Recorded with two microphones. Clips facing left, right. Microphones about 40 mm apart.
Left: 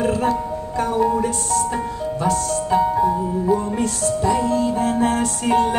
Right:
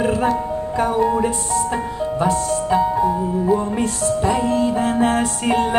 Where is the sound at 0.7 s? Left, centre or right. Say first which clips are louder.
Right 1 dB; right.